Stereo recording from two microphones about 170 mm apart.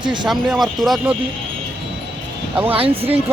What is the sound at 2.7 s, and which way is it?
Speech, 35° right (ahead or behind).